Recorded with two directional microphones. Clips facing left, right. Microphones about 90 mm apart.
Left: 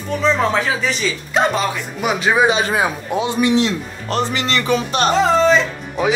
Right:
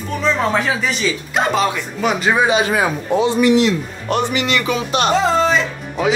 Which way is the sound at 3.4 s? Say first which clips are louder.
Right 3 dB; 25° left (ahead or behind).